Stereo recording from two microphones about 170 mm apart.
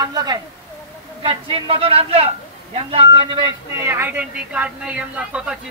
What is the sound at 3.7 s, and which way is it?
A man's voice, 15° right (ahead or behind).